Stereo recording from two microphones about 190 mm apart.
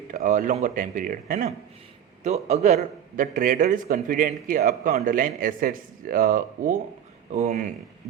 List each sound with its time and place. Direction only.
0.1 s a man's voice: 45° right (ahead or behind)
2.2 s a man's voice: 35° right (ahead or behind)